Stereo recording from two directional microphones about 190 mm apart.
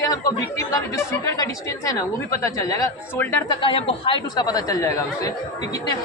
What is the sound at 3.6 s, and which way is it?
Speech, 30° left (ahead or behind).